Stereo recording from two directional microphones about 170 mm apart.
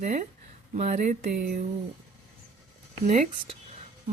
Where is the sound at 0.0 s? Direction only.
45° right (ahead or behind).